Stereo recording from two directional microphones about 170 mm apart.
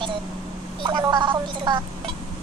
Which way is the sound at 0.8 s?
25° right (ahead or behind).